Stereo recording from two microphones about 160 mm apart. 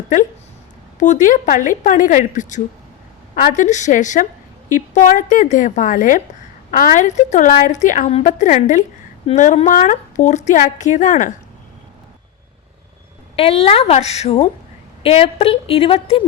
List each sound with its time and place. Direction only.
0.9 s speech: 50° left (ahead or behind)
13.3 s a woman's voice: 40° left (ahead or behind)